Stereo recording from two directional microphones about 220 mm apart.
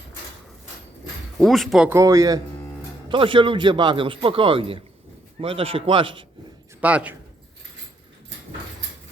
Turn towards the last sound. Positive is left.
turn(degrees=-5)  # may be behind; listen again after turning